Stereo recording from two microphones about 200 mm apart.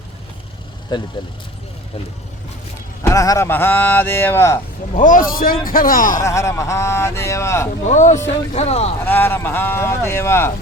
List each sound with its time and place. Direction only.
0.9 s speech: 20° left (ahead or behind)
3.1 s speech: 15° left (ahead or behind)
4.9 s speech: 40° left (ahead or behind)
6.1 s speech: 15° left (ahead or behind)
7.9 s speech: 35° left (ahead or behind)
9.0 s speech: 10° left (ahead or behind)